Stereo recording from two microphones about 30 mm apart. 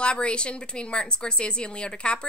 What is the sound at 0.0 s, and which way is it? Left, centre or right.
A woman's voice, left.